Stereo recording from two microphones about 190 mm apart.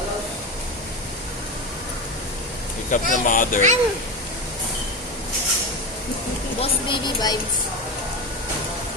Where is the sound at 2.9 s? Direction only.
45° left (ahead or behind).